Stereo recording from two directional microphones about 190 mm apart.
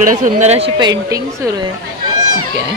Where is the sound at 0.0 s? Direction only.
40° right (ahead or behind).